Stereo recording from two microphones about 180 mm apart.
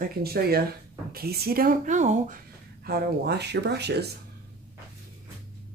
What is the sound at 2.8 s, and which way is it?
Speech, 60° right (ahead or behind).